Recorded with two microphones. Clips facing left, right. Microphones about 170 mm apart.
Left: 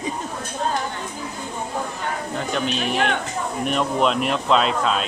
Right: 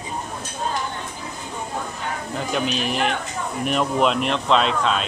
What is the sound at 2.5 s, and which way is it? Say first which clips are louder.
Speech: even; centre (ahead or behind).